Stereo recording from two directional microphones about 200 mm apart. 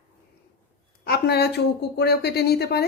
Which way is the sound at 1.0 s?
55° left (ahead or behind).